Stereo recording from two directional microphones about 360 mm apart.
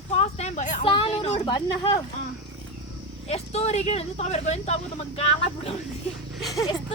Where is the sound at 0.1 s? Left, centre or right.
Centre.